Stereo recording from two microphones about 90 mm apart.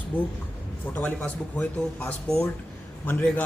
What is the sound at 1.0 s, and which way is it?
Speech, 5° left (ahead or behind).